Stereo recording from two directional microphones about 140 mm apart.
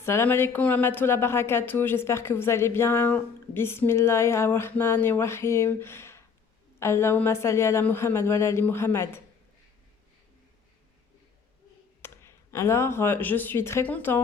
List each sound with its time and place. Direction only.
0.0 s speech: 20° left (ahead or behind)
12.0 s speech: 15° left (ahead or behind)